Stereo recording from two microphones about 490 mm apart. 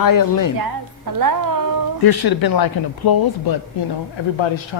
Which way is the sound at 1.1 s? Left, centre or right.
Right.